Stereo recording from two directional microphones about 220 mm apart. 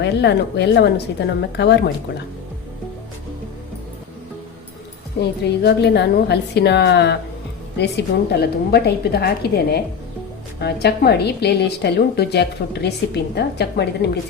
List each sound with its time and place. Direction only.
0.0 s a woman's voice: 50° left (ahead or behind)
5.2 s a woman's voice: 50° left (ahead or behind)
10.6 s a woman's voice: 50° left (ahead or behind)